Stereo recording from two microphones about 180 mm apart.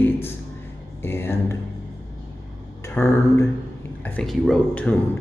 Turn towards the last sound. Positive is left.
turn(degrees=5)  # may be behind; listen again after turning